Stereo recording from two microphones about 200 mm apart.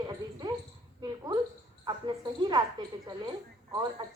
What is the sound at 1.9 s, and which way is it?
Speech, 20° right (ahead or behind).